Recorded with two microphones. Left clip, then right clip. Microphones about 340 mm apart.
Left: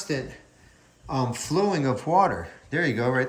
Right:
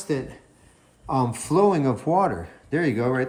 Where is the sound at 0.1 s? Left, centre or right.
Centre.